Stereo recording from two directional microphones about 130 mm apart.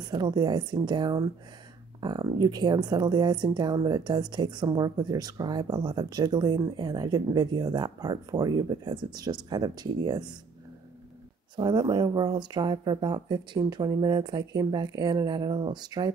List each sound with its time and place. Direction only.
0.0 s speech: 30° right (ahead or behind)
11.5 s speech: 35° right (ahead or behind)